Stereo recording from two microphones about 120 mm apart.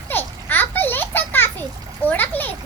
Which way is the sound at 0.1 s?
15° left (ahead or behind).